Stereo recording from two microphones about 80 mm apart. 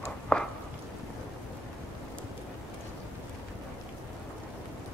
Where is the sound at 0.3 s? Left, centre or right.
Centre.